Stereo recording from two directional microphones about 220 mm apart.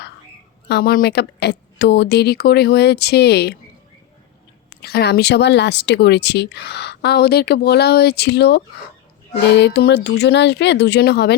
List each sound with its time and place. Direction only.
0.7 s speech: 45° left (ahead or behind)
4.8 s speech: 45° left (ahead or behind)